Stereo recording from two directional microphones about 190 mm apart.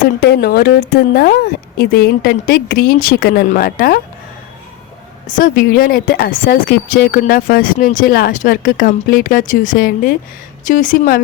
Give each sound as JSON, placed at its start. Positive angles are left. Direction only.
{"t": 0.2, "sound": "speech", "side_deg": 55}
{"t": 5.4, "sound": "speech", "side_deg": 50}